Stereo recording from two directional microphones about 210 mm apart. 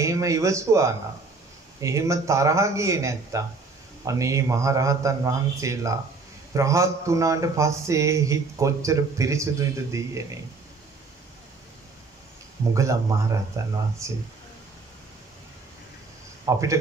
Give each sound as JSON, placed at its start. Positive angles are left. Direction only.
{"t": 0.0, "sound": "a man's voice", "side_deg": -15}
{"t": 12.7, "sound": "a man's voice", "side_deg": -15}
{"t": 16.5, "sound": "a man's voice", "side_deg": -15}